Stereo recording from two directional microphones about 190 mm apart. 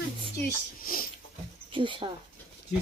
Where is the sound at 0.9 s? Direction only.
50° left (ahead or behind).